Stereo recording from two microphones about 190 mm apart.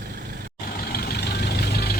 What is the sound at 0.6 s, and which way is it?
Vehicle, 50° left (ahead or behind).